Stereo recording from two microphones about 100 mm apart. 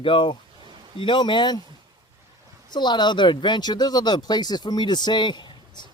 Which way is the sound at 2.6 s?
50° left (ahead or behind).